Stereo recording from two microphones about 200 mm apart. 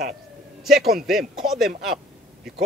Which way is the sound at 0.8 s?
50° right (ahead or behind).